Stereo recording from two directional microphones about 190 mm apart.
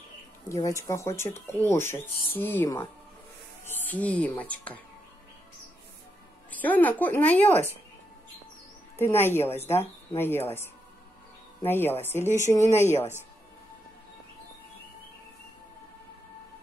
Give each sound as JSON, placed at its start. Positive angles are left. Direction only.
{"t": 0.5, "sound": "a woman's voice", "side_deg": 15}
{"t": 6.5, "sound": "speech", "side_deg": 10}
{"t": 8.9, "sound": "speech", "side_deg": 10}